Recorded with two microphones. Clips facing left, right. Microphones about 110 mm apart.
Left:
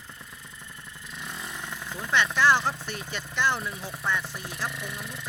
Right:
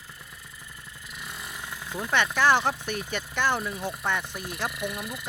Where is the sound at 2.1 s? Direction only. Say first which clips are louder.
Even; 50° right (ahead or behind).